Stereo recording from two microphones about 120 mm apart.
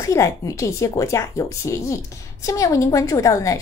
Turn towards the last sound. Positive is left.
turn(degrees=25)  # may be behind; listen again after turning